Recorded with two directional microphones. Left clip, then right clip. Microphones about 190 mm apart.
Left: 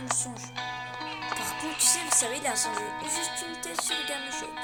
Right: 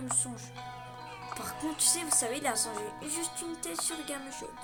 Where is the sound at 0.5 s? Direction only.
40° left (ahead or behind).